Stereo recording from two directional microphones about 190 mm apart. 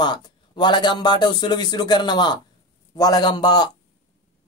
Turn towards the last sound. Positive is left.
turn(degrees=20)  # may be behind; listen again after turning